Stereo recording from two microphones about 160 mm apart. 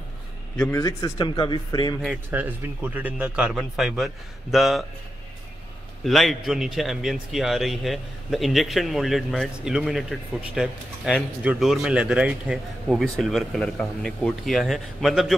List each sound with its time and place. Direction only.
0.7 s speech: 20° left (ahead or behind)
2.0 s a man's voice: 5° right (ahead or behind)
6.0 s a man's voice: centre (ahead or behind)